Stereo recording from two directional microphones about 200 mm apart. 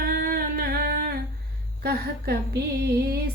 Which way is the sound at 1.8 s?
50° right (ahead or behind).